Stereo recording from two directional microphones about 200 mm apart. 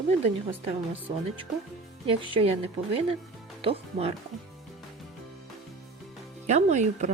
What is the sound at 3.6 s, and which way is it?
Speech, 30° right (ahead or behind).